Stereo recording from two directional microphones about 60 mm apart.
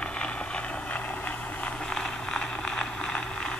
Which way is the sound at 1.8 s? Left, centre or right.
Centre.